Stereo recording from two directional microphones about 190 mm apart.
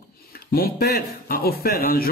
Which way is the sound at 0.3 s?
55° left (ahead or behind).